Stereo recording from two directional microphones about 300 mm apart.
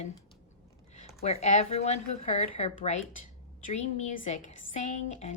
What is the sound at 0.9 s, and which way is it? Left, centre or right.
A woman's voice, left.